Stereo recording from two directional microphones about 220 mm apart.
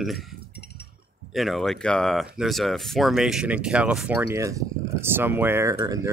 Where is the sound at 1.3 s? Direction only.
Centre (ahead or behind).